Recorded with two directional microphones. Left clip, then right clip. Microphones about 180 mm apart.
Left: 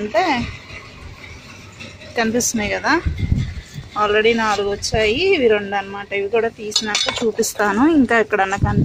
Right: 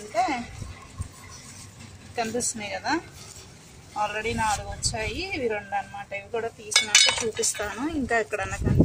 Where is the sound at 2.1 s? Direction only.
60° left (ahead or behind).